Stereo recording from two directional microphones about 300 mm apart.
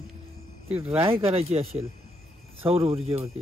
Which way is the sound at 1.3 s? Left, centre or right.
Centre.